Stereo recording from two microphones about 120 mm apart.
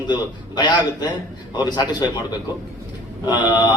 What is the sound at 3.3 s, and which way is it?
Speech, 40° left (ahead or behind).